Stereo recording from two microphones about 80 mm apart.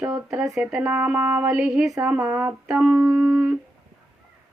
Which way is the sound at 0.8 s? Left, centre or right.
Right.